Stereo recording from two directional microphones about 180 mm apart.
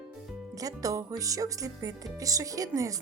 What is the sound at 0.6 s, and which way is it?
Speech, 20° right (ahead or behind).